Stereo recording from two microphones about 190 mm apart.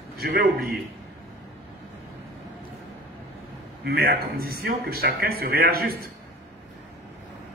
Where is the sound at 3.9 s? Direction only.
55° right (ahead or behind).